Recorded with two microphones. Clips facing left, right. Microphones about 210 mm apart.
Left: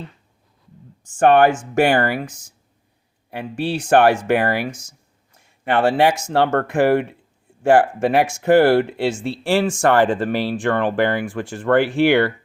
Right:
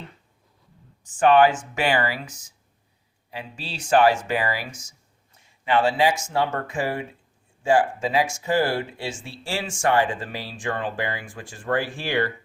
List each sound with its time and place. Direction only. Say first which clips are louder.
1.2 s speech: left 3 dB; 50° left (ahead or behind); by 12.3 s 70° left (ahead or behind)